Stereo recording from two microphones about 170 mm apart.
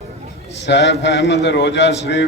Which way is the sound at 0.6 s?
90° left.